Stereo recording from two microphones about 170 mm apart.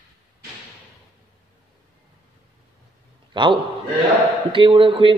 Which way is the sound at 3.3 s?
30° right (ahead or behind).